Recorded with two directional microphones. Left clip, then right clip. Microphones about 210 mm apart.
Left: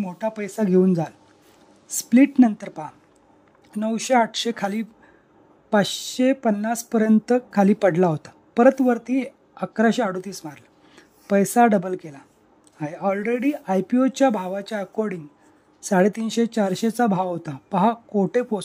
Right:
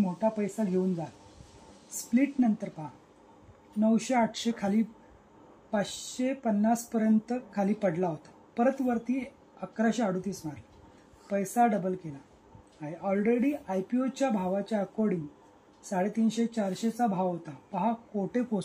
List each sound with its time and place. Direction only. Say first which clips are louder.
0.0 s speech: left 2 dB; 45° left (ahead or behind)
2.1 s speech: left 11 dB; 45° left (ahead or behind)